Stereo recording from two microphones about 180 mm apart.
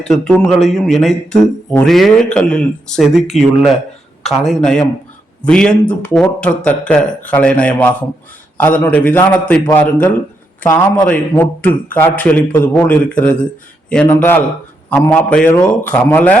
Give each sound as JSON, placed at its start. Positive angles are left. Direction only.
{"t": 0.0, "sound": "speech", "side_deg": 5}